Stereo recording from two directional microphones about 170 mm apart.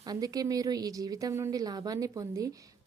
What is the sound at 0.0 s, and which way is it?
A woman's voice, 20° right (ahead or behind).